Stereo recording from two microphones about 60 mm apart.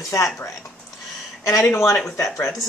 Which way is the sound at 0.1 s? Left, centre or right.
Left.